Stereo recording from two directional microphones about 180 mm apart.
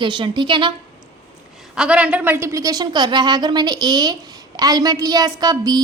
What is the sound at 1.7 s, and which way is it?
A woman's voice, 5° right (ahead or behind).